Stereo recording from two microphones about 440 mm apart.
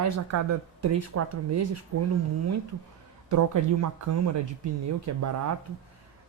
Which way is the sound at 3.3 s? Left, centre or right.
Right.